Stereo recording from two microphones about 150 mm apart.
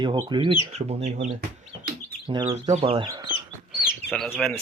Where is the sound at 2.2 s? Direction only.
35° right (ahead or behind).